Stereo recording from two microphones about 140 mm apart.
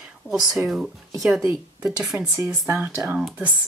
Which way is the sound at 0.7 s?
Centre (ahead or behind).